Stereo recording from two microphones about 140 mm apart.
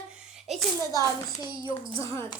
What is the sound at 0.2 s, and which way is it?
Hands, 5° right (ahead or behind).